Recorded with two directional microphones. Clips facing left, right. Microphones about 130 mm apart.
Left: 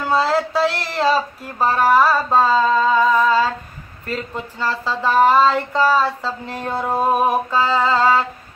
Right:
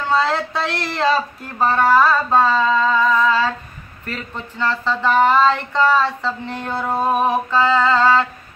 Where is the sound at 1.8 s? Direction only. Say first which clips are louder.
Even; 5° left (ahead or behind).